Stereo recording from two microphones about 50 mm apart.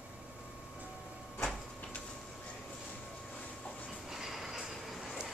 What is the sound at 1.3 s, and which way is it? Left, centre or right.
Printer, left.